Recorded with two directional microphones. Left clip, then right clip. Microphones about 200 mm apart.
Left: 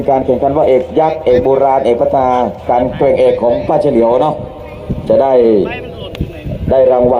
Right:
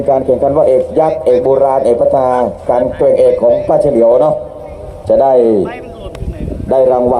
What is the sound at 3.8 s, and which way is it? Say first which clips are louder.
A man's voice: right 1 dB; 55° right (ahead or behind).